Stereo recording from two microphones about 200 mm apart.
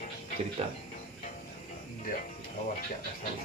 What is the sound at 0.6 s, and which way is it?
Speech, 30° right (ahead or behind).